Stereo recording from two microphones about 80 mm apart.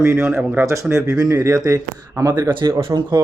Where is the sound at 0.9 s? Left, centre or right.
Right.